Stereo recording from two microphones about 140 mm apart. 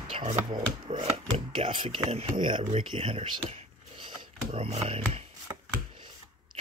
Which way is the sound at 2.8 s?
40° right (ahead or behind).